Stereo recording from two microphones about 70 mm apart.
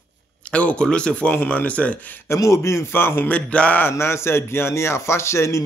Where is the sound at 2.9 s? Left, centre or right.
Left.